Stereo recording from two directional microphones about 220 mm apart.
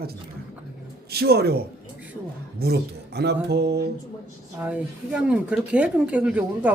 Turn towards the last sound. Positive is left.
turn(degrees=-5)  # may be behind; listen again after turning